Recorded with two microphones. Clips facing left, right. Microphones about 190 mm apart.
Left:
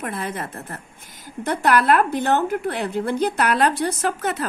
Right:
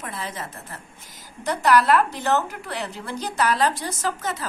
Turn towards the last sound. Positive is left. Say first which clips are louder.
# left 4 dB
turn(degrees=60)  # may be behind; listen again after turning